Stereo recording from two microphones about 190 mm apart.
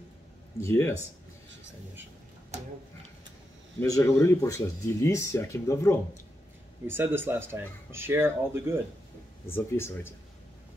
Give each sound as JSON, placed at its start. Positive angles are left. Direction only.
{"t": 0.6, "sound": "speech", "side_deg": 15}
{"t": 3.8, "sound": "speech", "side_deg": 15}
{"t": 6.9, "sound": "speech", "side_deg": -10}
{"t": 9.5, "sound": "speech", "side_deg": 10}